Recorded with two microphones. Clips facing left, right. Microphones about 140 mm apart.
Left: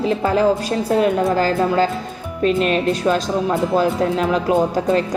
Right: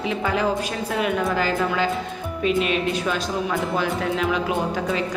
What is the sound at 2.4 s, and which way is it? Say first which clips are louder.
Speech: left 5 dB; 5° right (ahead or behind).